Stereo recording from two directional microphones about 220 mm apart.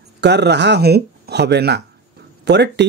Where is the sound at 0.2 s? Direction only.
50° right (ahead or behind).